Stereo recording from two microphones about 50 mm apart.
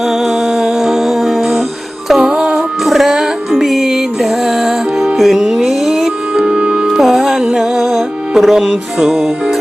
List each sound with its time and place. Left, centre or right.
0.6 s music: centre
2.8 s music: centre
6.3 s music: centre